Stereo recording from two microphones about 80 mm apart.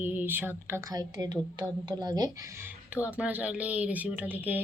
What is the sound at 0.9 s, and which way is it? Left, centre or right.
A woman's voice, right.